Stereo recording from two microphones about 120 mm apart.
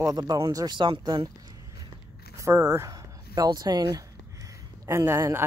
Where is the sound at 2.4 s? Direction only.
25° right (ahead or behind).